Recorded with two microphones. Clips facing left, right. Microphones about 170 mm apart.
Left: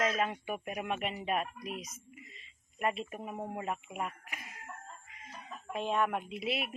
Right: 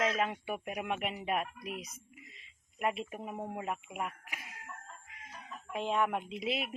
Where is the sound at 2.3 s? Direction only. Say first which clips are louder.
Left 2 dB; 10° right (ahead or behind).